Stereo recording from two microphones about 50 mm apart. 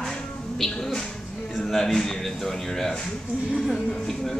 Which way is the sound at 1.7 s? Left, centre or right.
Centre.